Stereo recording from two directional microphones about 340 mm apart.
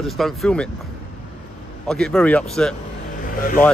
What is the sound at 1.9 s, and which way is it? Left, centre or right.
Speech, centre.